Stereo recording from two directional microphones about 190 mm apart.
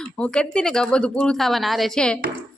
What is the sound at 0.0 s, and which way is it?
Speech, 5° left (ahead or behind).